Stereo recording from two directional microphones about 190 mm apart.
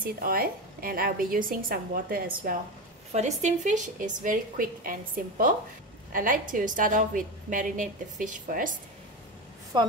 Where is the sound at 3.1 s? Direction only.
40° right (ahead or behind).